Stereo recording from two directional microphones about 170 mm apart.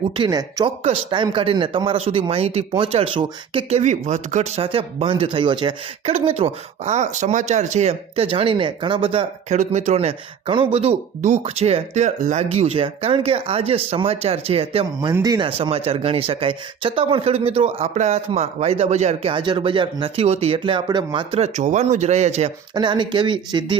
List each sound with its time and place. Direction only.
0.2 s speech: 25° right (ahead or behind)
9.6 s speech: 45° right (ahead or behind)
15.1 s speech: 20° right (ahead or behind); by 22.5 s 40° right (ahead or behind)
22.7 s speech: 25° right (ahead or behind)